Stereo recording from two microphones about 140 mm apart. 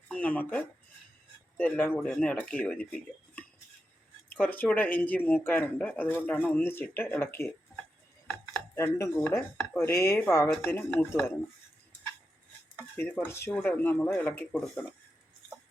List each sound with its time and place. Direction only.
0.1 s speech: 10° left (ahead or behind)
8.7 s speech: 15° left (ahead or behind)
13.0 s speech: 15° left (ahead or behind)